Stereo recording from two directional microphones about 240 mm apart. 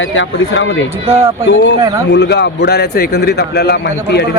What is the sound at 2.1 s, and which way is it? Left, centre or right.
A man's voice, left.